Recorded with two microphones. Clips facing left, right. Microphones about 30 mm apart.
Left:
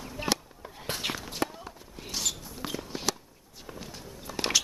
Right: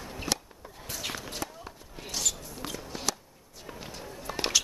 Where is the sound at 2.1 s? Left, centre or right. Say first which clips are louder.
Even; centre.